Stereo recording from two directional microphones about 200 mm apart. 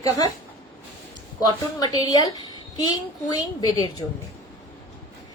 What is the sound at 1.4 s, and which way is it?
A woman's voice, 20° left (ahead or behind).